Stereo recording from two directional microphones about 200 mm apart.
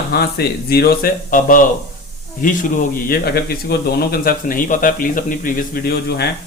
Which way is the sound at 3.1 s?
50° left (ahead or behind).